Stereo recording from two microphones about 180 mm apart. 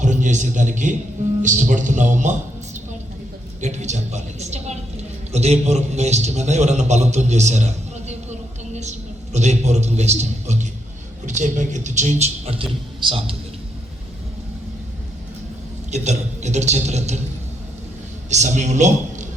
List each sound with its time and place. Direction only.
0.0 s a man's voice: 45° right (ahead or behind)
3.6 s a woman's voice: 40° right (ahead or behind)
15.9 s a man's voice: 40° right (ahead or behind)
18.3 s a man's voice: 40° right (ahead or behind)